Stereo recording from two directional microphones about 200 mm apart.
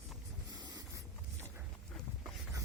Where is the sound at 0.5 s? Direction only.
20° right (ahead or behind).